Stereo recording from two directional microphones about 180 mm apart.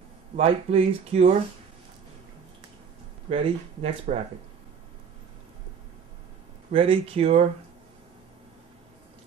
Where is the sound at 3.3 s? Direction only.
35° right (ahead or behind).